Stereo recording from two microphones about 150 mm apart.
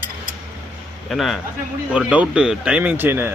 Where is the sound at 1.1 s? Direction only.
Centre (ahead or behind).